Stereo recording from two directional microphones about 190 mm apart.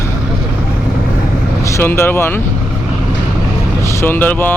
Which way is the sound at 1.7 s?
10° left (ahead or behind).